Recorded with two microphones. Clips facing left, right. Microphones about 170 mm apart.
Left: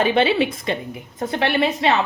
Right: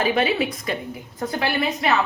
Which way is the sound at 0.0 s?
25° left (ahead or behind).